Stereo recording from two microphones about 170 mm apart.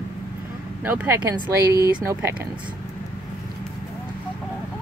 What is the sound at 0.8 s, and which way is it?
Speech, 10° right (ahead or behind).